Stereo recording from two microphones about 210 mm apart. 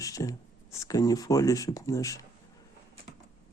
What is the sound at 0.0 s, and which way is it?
Speech, 15° left (ahead or behind).